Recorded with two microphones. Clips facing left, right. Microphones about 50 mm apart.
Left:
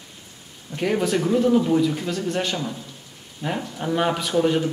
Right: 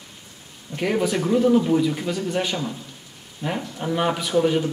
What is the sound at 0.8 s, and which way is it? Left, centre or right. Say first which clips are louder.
A man's voice: even; centre.